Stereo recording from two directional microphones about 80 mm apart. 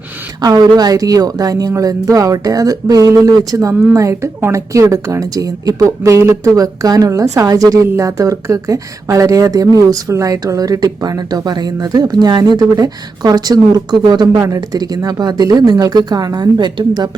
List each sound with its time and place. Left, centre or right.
0.4 s speech: right